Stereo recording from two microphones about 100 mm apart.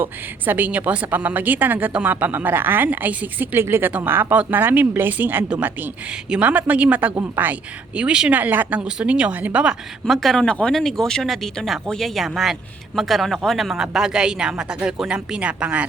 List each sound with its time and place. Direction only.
0.0 s a woman's voice: 20° right (ahead or behind)
10.1 s a woman's voice: 5° left (ahead or behind); by 15.9 s 10° right (ahead or behind)